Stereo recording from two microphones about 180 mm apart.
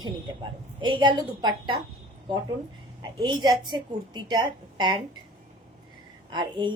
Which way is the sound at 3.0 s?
25° right (ahead or behind).